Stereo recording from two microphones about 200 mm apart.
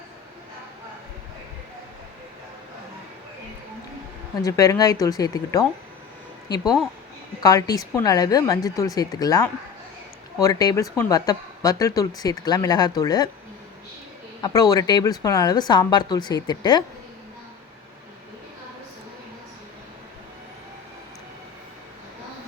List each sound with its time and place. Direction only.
4.4 s speech: 15° left (ahead or behind)
14.4 s speech: 20° left (ahead or behind)